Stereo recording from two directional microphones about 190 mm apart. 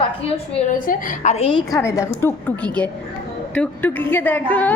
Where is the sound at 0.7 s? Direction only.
45° left (ahead or behind).